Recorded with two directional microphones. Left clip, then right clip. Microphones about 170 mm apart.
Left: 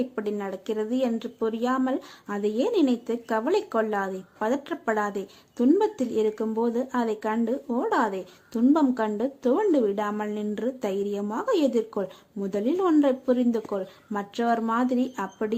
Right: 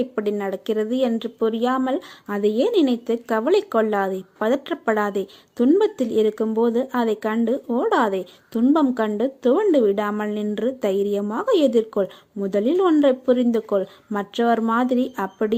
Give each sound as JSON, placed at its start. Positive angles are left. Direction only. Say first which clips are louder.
{"t": 0.0, "sound": "speech", "louder": "right 6 dB", "side_deg": -25}